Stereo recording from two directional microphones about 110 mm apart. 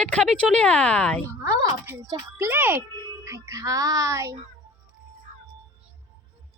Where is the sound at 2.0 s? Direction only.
30° right (ahead or behind).